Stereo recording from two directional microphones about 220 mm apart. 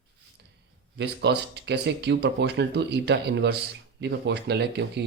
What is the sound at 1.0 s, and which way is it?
Speech, 50° right (ahead or behind).